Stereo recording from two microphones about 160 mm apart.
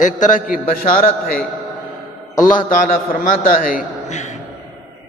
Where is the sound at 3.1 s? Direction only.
60° left (ahead or behind).